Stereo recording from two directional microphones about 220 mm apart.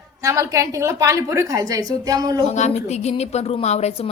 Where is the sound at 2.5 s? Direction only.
30° left (ahead or behind).